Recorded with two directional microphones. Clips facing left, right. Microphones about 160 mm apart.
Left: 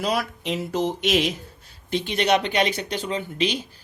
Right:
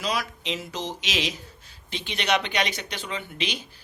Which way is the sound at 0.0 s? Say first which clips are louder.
Left 4 dB; 55° left (ahead or behind).